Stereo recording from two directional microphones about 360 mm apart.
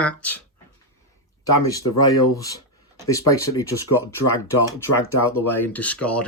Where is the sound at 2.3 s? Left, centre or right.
Centre.